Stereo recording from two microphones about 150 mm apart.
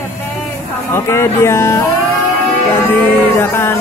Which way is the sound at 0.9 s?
15° left (ahead or behind).